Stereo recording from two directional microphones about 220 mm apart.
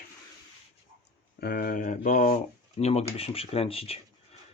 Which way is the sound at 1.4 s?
40° left (ahead or behind).